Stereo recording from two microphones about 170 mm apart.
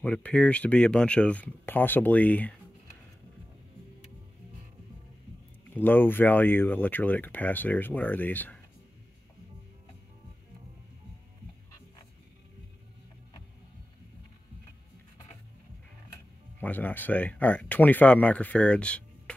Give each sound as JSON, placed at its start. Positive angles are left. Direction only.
{"t": 0.0, "sound": "speech", "side_deg": 5}
{"t": 5.8, "sound": "speech", "side_deg": 10}
{"t": 16.1, "sound": "speech", "side_deg": 10}